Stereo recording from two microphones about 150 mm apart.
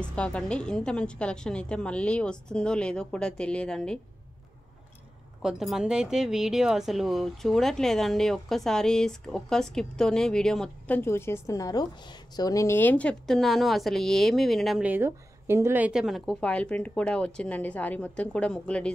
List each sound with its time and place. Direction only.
0.0 s a woman's voice: 5° left (ahead or behind)
5.4 s speech: 5° right (ahead or behind)
11.0 s a woman's voice: 15° left (ahead or behind); by 14.9 s centre (ahead or behind)
14.9 s a woman's voice: 15° right (ahead or behind); by 18.9 s 5° left (ahead or behind)